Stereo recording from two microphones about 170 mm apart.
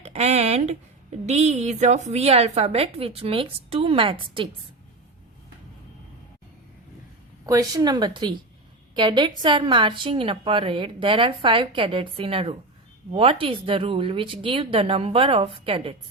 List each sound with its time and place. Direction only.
0.0 s a sound: 40° right (ahead or behind)
1.3 s a woman's voice: 40° right (ahead or behind)
7.4 s a woman's voice: 20° right (ahead or behind)